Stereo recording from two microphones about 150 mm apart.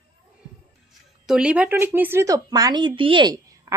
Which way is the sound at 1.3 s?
5° right (ahead or behind).